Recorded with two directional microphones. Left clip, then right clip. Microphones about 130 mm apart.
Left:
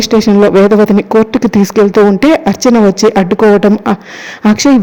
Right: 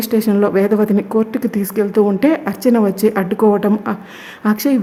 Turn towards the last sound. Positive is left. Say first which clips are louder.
# left 8 dB
turn(degrees=30)  # may be behind; listen again after turning